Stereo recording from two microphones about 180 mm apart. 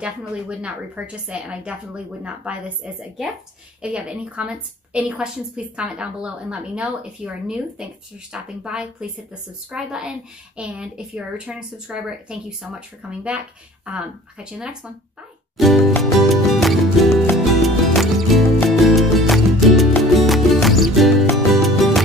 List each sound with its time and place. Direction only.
0.0 s a woman's voice: 5° right (ahead or behind)
15.5 s music: centre (ahead or behind)